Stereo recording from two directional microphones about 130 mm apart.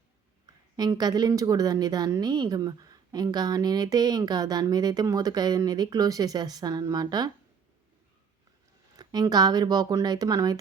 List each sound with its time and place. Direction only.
0.8 s a woman's voice: 30° right (ahead or behind)
9.0 s speech: 30° right (ahead or behind)